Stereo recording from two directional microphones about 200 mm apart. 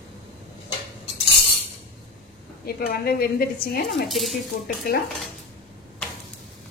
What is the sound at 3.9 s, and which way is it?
Speech, centre (ahead or behind).